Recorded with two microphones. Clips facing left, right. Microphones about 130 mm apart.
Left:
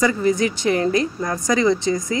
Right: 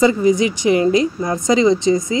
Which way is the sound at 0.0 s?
15° right (ahead or behind).